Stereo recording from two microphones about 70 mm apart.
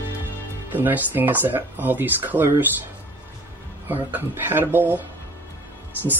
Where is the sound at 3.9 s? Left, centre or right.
Right.